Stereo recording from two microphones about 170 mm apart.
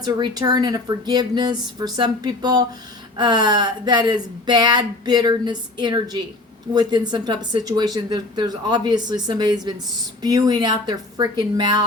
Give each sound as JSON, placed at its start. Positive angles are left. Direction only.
{"t": 0.0, "sound": "speech", "side_deg": -25}